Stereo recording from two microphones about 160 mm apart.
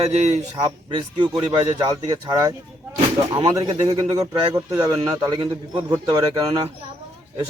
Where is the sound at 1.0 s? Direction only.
30° right (ahead or behind).